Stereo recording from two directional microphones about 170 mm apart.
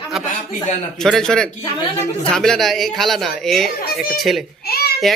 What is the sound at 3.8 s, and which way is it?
Speech, 65° left (ahead or behind).